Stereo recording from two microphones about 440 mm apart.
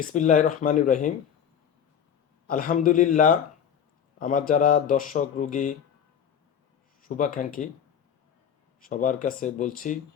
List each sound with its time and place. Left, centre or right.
0.0 s speech: centre
2.5 s speech: centre
7.2 s speech: centre
8.8 s speech: centre